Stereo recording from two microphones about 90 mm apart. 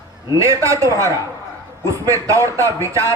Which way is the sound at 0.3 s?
35° right (ahead or behind).